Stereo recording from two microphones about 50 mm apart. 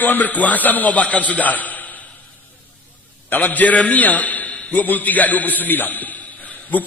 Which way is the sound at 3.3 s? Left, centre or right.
Left.